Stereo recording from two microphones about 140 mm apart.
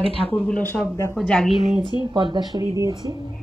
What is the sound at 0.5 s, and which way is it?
Speech, 10° left (ahead or behind).